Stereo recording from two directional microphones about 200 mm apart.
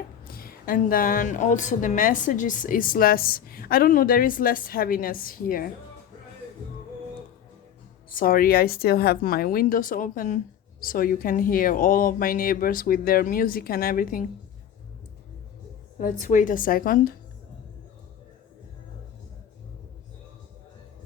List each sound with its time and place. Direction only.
0.3 s a woman's voice: 45° left (ahead or behind)
8.1 s a woman's voice: 45° left (ahead or behind)
16.0 s a woman's voice: 40° left (ahead or behind)